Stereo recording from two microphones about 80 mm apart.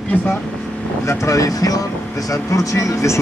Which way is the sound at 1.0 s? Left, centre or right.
Left.